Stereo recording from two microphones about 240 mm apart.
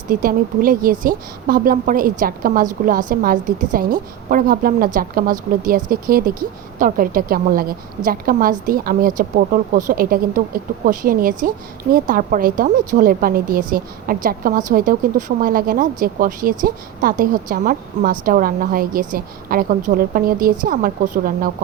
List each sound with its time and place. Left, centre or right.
0.1 s a woman's voice: right